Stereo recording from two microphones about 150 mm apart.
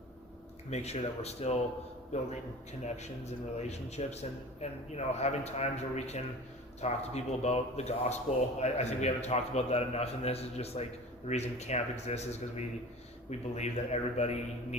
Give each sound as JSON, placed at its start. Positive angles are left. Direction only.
{"t": 0.7, "sound": "a man's voice", "side_deg": 45}
{"t": 2.8, "sound": "a man's voice", "side_deg": 50}